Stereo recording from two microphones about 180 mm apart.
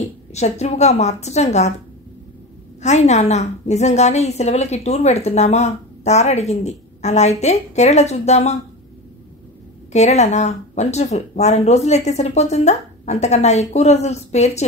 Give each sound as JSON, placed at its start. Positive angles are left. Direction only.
{"t": 0.0, "sound": "a woman's voice", "side_deg": 35}
{"t": 2.8, "sound": "a woman's voice", "side_deg": 40}
{"t": 9.9, "sound": "a woman's voice", "side_deg": 40}